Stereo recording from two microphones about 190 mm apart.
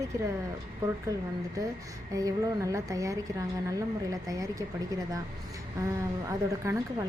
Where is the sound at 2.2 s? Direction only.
15° right (ahead or behind).